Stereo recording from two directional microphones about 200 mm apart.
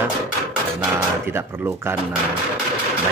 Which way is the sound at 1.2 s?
10° right (ahead or behind).